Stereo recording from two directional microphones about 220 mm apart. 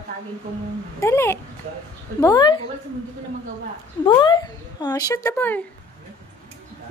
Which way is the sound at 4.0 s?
20° left (ahead or behind).